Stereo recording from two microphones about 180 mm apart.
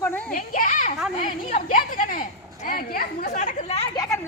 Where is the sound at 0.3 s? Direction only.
50° left (ahead or behind).